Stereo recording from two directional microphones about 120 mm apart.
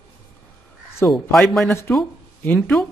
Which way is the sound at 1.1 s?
Centre (ahead or behind).